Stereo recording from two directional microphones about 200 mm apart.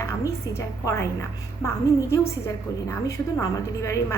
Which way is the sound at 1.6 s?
15° left (ahead or behind).